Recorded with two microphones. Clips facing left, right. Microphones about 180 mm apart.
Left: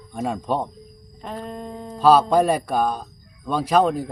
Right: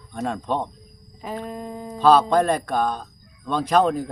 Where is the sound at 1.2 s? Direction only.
5° right (ahead or behind).